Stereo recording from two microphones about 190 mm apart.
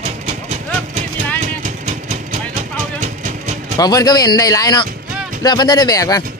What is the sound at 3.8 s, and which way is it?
Speech, 20° left (ahead or behind).